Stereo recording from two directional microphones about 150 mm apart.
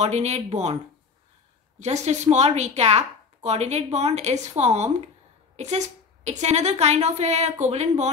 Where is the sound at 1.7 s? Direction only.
50° right (ahead or behind).